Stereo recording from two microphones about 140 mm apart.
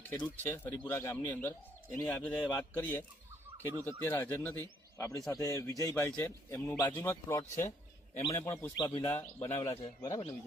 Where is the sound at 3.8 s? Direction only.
15° left (ahead or behind).